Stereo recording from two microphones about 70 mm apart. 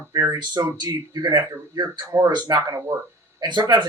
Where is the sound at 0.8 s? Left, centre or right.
Right.